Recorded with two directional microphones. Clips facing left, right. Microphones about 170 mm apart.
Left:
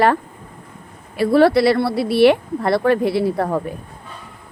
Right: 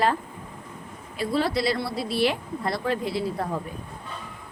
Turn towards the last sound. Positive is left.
turn(degrees=70)  # may be behind; listen again after turning